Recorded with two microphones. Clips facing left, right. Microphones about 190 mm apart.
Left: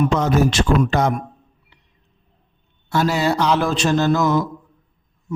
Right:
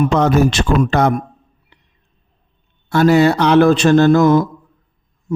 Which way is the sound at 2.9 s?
60° right (ahead or behind).